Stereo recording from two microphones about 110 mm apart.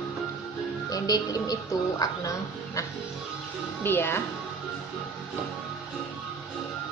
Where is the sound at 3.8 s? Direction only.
20° left (ahead or behind).